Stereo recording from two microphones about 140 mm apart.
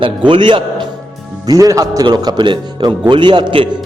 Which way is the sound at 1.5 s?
25° right (ahead or behind).